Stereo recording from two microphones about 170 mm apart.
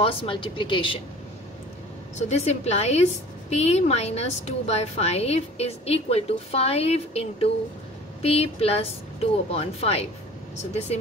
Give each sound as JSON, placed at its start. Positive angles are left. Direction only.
{"t": 0.0, "sound": "a woman's voice", "side_deg": 35}
{"t": 2.1, "sound": "a woman's voice", "side_deg": 40}